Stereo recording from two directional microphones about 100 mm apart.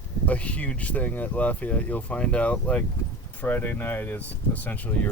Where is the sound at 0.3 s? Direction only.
15° left (ahead or behind).